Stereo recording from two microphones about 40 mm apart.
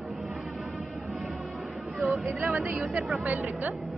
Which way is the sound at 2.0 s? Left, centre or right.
Centre.